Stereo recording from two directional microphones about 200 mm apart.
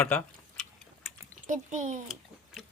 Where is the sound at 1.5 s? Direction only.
40° right (ahead or behind).